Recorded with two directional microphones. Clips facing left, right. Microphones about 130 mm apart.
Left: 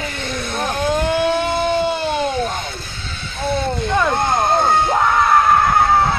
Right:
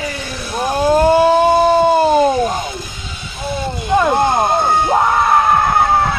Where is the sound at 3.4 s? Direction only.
10° right (ahead or behind).